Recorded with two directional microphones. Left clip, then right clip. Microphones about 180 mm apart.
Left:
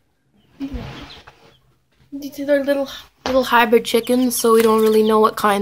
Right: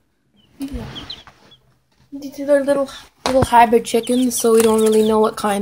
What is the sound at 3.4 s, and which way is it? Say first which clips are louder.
Speech: right 3 dB; 10° left (ahead or behind).